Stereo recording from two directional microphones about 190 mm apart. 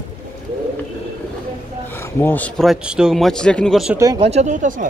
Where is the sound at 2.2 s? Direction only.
10° left (ahead or behind).